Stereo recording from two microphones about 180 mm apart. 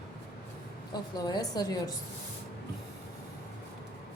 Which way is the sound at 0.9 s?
20° left (ahead or behind).